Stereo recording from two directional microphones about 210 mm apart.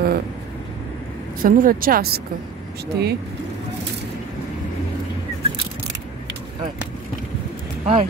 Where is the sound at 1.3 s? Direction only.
40° right (ahead or behind).